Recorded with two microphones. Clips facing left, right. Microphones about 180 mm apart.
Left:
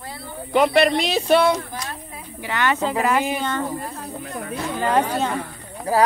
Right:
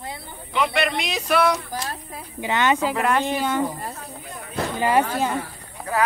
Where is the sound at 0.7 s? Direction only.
35° left (ahead or behind).